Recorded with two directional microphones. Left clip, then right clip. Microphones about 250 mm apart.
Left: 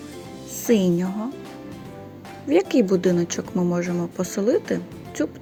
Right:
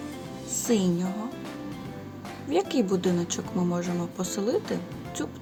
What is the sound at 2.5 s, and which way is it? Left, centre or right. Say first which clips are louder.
Speech: left 7 dB; centre.